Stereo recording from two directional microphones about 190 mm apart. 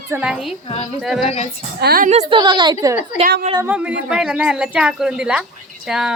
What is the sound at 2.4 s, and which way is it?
Speech, 25° right (ahead or behind).